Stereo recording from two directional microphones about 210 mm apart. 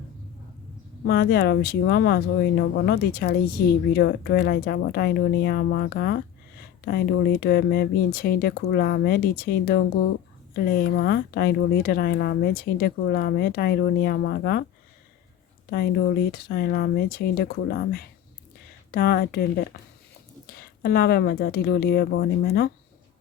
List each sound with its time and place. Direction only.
1.0 s speech: 50° left (ahead or behind)
15.7 s speech: 45° left (ahead or behind)